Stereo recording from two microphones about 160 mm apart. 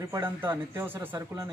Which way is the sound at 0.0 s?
15° right (ahead or behind).